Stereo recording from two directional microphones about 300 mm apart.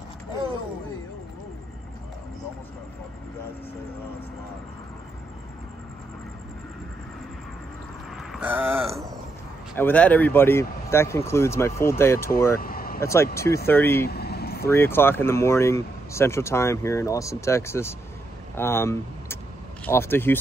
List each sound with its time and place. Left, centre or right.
8.2 s a sound: centre
9.8 s speech: centre
12.5 s vehicle: left
13.0 s speech: centre
14.0 s vehicle: left
14.7 s speech: centre